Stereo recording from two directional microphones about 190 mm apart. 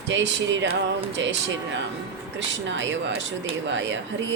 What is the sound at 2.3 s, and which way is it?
Speech, 75° right (ahead or behind).